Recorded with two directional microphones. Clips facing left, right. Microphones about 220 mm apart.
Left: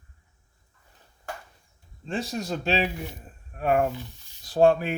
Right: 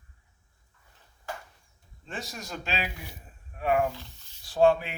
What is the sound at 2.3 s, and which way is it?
Speech, 35° left (ahead or behind).